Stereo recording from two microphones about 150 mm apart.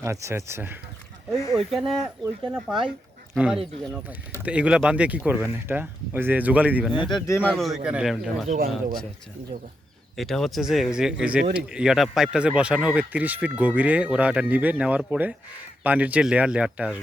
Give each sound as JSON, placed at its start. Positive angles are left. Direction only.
{"t": 0.0, "sound": "speech", "side_deg": -20}
{"t": 1.3, "sound": "speech", "side_deg": 0}
{"t": 6.9, "sound": "speech", "side_deg": 30}
{"t": 7.3, "sound": "a man's voice", "side_deg": 15}
{"t": 7.5, "sound": "speech", "side_deg": 0}
{"t": 9.5, "sound": "speech", "side_deg": -45}
{"t": 10.2, "sound": "speech", "side_deg": 0}